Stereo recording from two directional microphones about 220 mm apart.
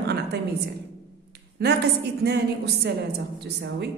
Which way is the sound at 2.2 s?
50° right (ahead or behind).